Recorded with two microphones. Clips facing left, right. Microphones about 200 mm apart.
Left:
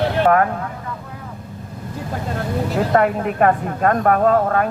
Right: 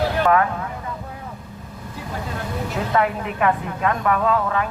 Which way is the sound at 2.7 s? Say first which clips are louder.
Left 4 dB; 45° left (ahead or behind).